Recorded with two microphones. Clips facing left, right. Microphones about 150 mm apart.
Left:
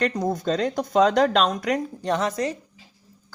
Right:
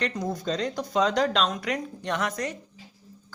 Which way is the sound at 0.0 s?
50° left (ahead or behind).